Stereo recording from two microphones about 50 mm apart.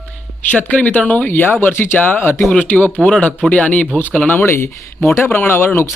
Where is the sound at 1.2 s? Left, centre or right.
Left.